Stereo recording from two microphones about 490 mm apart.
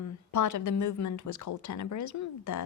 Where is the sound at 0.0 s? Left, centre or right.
Left.